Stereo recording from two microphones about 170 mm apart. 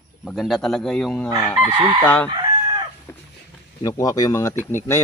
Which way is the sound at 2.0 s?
10° left (ahead or behind).